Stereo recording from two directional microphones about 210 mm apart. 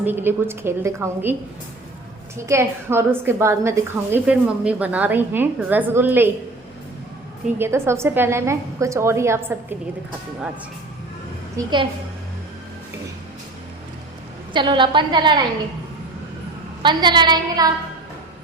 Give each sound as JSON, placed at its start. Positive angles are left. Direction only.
{"t": 0.0, "sound": "a woman's voice", "side_deg": -10}
{"t": 7.6, "sound": "a woman's voice", "side_deg": -10}
{"t": 11.5, "sound": "a woman's voice", "side_deg": -20}
{"t": 14.5, "sound": "a woman's voice", "side_deg": -20}
{"t": 16.8, "sound": "a woman's voice", "side_deg": -20}